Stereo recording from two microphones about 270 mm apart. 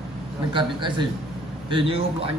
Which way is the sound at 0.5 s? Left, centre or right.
Centre.